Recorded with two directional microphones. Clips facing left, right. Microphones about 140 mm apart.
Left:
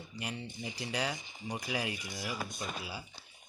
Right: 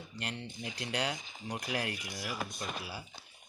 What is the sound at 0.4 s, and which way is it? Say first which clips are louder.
Speech: even; 90° right.